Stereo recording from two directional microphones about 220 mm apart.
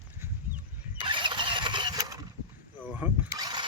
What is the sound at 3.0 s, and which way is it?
Vehicle, 20° right (ahead or behind).